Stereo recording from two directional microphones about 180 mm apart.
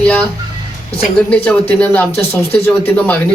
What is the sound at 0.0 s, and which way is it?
Music, 5° left (ahead or behind).